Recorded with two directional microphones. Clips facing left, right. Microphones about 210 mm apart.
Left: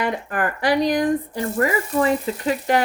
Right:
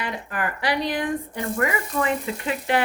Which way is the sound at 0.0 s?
45° left (ahead or behind).